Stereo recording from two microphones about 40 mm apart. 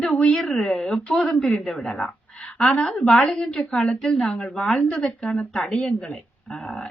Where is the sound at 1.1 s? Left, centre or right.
Left.